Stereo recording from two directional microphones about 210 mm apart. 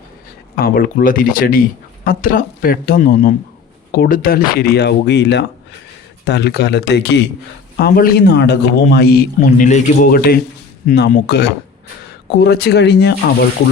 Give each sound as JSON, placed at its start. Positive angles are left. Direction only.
{"t": 0.5, "sound": "a man's voice", "side_deg": 45}
{"t": 9.6, "sound": "a man's voice", "side_deg": 35}
{"t": 12.3, "sound": "a man's voice", "side_deg": 50}